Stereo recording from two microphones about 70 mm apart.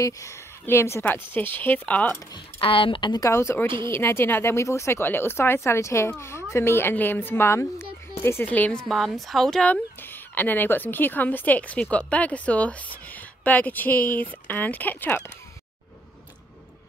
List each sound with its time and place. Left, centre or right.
0.0 s speech: left
0.7 s speech: left
1.0 s speech: left
3.0 s speech: left
3.3 s speech: left
5.0 s speech: left
8.5 s speech: left
8.8 s a woman's voice: centre
9.7 s speech: left